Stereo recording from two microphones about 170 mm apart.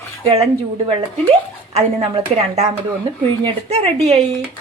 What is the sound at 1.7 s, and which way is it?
A woman's voice, 35° right (ahead or behind).